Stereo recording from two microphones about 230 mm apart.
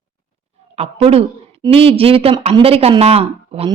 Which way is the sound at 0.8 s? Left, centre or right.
Right.